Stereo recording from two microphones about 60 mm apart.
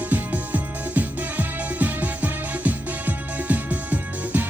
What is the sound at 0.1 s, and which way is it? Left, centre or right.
Music, right.